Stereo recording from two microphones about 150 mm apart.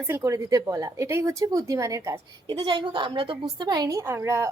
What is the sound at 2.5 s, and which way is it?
A woman's voice, 30° right (ahead or behind).